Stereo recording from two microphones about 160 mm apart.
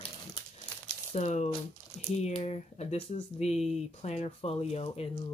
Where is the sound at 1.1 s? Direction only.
45° left (ahead or behind).